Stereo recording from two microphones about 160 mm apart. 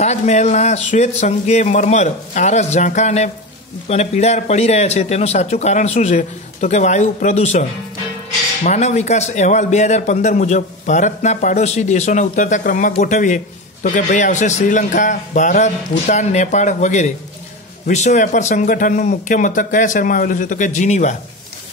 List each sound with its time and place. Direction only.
0.0 s speech: 45° left (ahead or behind)
8.6 s speech: 45° left (ahead or behind)